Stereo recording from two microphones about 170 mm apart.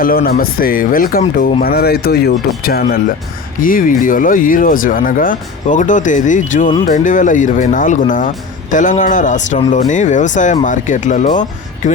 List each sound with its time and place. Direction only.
0.0 s speech: 60° left (ahead or behind)
3.6 s speech: 55° left (ahead or behind)